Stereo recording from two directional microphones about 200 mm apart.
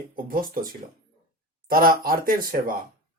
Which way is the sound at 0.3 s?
45° right (ahead or behind).